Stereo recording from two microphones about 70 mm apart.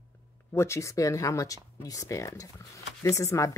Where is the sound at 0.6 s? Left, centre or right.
Left.